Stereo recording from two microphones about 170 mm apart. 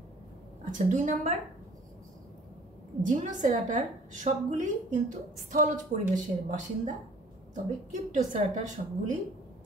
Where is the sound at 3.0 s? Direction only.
45° right (ahead or behind).